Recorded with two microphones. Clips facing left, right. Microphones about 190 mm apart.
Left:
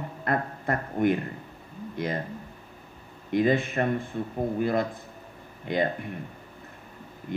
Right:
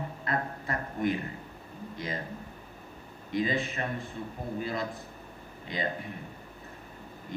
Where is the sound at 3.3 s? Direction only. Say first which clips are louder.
Left 6 dB; 55° left (ahead or behind).